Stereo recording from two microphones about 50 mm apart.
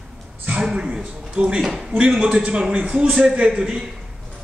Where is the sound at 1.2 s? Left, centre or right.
Centre.